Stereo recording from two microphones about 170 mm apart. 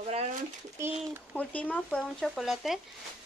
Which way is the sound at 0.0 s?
40° right (ahead or behind).